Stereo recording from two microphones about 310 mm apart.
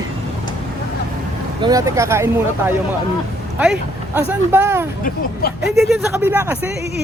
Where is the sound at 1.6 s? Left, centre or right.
Centre.